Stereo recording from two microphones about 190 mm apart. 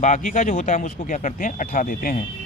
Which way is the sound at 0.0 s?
40° left (ahead or behind).